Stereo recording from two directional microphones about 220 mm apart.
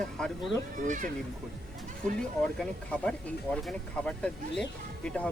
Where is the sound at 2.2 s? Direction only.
5° left (ahead or behind).